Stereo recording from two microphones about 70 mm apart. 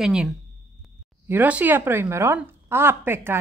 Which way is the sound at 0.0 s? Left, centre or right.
Centre.